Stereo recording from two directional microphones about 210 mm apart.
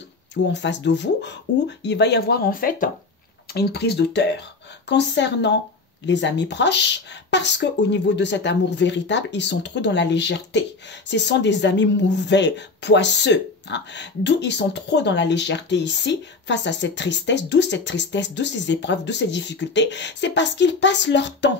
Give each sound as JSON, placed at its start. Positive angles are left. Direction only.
{"t": 0.3, "sound": "speech", "side_deg": 55}